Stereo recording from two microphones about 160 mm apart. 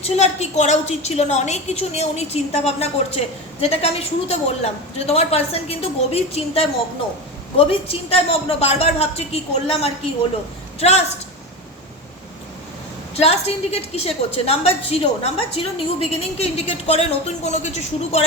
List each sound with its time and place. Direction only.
0.0 s a woman's voice: 45° left (ahead or behind)
13.1 s a woman's voice: 40° left (ahead or behind)